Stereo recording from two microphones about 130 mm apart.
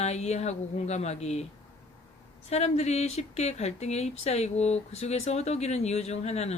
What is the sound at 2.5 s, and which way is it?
Speech, 55° left (ahead or behind).